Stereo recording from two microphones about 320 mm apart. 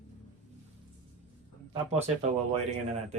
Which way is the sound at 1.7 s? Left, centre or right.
Centre.